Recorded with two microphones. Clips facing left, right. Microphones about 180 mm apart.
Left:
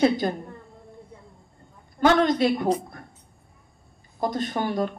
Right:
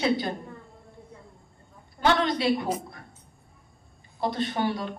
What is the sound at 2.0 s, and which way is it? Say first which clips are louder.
Speech: left 5 dB; 45° left (ahead or behind).